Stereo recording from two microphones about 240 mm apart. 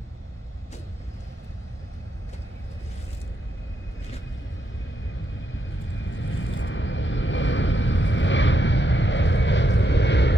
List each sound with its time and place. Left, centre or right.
6.0 s vehicle: left